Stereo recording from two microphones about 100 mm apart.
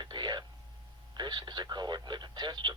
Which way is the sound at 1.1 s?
45° right (ahead or behind).